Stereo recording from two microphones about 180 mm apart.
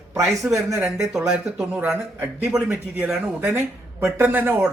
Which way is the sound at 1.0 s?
5° right (ahead or behind).